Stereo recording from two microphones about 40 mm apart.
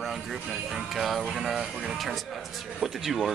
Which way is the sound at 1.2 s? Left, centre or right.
Centre.